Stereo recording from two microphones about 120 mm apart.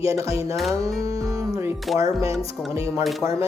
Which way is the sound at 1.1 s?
30° right (ahead or behind).